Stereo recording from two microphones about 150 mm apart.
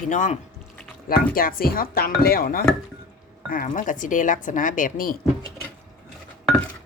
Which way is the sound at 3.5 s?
65° left (ahead or behind).